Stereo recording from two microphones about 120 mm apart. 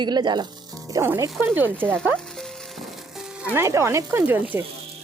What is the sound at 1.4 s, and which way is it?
Speech, 15° right (ahead or behind).